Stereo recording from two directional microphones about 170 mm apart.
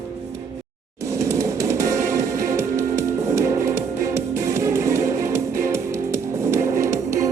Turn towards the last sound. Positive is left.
turn(degrees=-20)  # may be behind; listen again after turning